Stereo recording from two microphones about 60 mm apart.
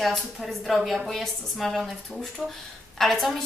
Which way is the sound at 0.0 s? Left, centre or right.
Centre.